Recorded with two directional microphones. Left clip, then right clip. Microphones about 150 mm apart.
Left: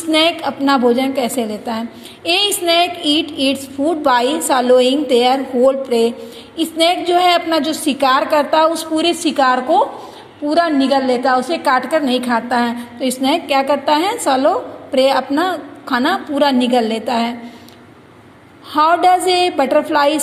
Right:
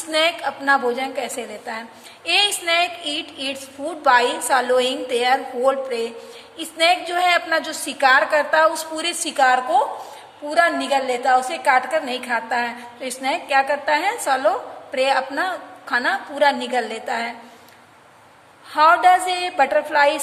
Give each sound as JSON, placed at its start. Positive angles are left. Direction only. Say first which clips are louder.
{"t": 0.1, "sound": "a woman's voice", "louder": "left 5 dB", "side_deg": 10}
{"t": 18.7, "sound": "a woman's voice", "louder": "left 2 dB", "side_deg": 15}